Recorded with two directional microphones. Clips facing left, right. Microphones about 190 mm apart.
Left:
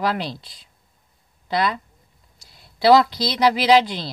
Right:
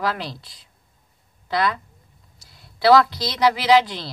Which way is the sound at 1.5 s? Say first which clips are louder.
Even; 15° left (ahead or behind).